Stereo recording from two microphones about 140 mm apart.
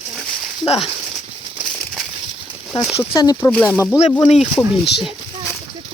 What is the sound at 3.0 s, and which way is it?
Speech, 20° left (ahead or behind).